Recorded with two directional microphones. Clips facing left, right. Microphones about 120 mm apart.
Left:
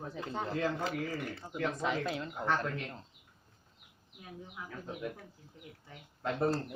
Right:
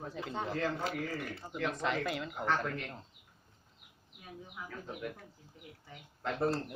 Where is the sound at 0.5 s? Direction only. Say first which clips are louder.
Left 2 dB; 15° left (ahead or behind).